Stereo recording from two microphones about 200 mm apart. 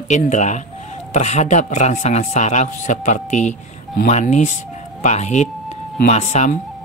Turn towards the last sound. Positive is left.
turn(degrees=35)  # may be behind; listen again after turning